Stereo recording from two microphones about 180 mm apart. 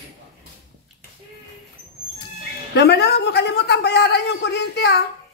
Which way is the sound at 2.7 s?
65° left (ahead or behind).